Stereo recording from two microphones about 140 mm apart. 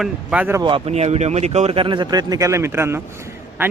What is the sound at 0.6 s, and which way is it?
Speech, 35° right (ahead or behind).